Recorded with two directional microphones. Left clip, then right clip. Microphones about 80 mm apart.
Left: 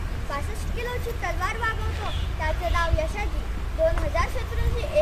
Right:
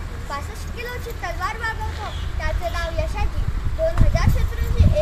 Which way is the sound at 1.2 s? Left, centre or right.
Centre.